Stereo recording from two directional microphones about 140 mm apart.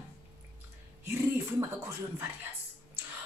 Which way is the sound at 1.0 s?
20° right (ahead or behind).